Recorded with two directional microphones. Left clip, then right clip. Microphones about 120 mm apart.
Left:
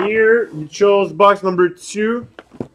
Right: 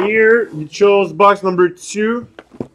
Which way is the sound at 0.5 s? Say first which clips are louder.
Right 2 dB; 25° right (ahead or behind).